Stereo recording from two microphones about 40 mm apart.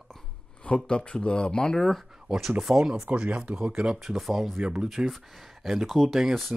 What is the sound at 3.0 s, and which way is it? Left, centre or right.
Speech, right.